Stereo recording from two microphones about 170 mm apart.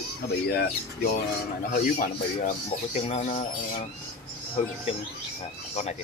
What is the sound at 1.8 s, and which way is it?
Speech, 55° left (ahead or behind).